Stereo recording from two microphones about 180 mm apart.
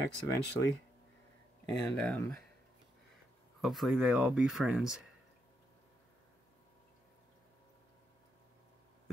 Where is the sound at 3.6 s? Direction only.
Centre (ahead or behind).